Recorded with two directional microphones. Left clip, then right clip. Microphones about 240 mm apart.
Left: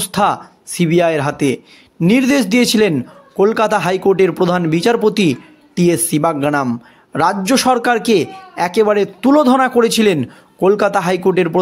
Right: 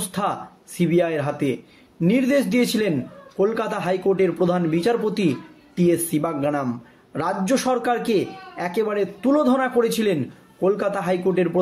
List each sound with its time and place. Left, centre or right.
0.1 s speech: left